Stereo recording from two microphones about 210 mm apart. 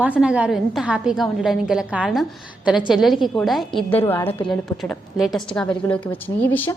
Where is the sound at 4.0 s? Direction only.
10° left (ahead or behind).